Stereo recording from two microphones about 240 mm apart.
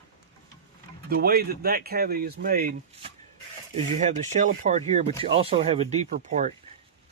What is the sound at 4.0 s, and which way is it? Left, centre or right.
Speech, right.